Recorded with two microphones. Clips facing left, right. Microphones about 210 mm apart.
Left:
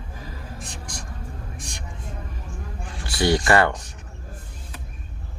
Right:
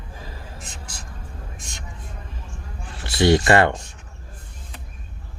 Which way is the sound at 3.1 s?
25° right (ahead or behind).